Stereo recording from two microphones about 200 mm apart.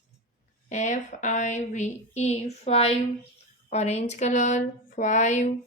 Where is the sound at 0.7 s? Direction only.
35° left (ahead or behind).